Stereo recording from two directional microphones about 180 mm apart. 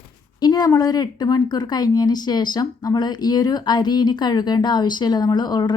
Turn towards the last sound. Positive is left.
turn(degrees=25)  # may be behind; listen again after turning